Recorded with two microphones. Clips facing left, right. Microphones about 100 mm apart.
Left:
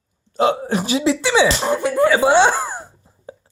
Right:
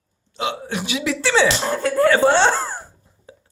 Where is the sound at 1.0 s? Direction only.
20° left (ahead or behind).